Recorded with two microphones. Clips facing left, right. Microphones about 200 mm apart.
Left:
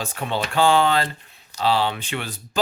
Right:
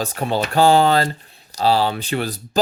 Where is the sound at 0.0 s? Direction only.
40° right (ahead or behind).